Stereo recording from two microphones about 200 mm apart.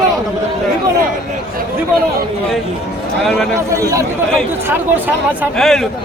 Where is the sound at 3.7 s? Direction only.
15° right (ahead or behind).